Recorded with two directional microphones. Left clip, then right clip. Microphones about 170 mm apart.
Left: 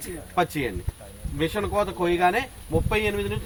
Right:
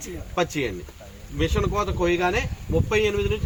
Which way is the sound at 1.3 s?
25° left (ahead or behind).